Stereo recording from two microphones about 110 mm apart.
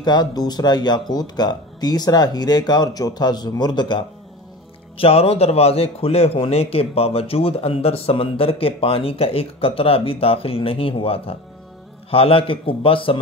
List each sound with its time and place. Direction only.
0.0 s speech: 40° left (ahead or behind)
4.9 s a man's voice: 60° left (ahead or behind)